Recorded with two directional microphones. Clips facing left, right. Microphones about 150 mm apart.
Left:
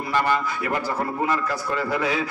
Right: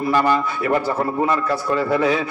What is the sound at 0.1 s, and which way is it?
A man's voice, 35° right (ahead or behind).